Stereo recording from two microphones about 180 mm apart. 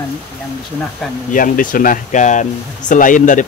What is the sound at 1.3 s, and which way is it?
Speech, 50° left (ahead or behind).